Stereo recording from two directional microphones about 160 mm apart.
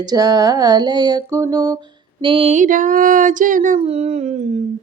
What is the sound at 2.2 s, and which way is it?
Mantra, 35° right (ahead or behind).